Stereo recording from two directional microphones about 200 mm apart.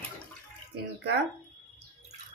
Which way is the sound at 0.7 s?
55° right (ahead or behind).